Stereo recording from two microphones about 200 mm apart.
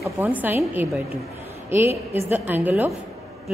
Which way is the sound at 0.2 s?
10° right (ahead or behind).